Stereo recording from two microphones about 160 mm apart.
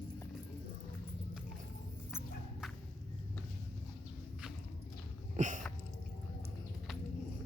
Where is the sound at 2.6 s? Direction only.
5° right (ahead or behind).